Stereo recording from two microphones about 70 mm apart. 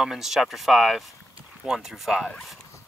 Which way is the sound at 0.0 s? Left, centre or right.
Centre.